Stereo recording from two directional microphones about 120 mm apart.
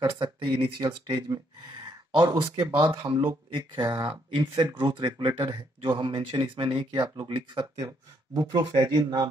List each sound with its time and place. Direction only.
0.0 s speech: 40° right (ahead or behind)
8.4 s speech: 30° right (ahead or behind)